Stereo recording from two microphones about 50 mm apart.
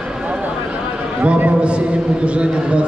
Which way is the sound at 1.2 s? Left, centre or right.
Right.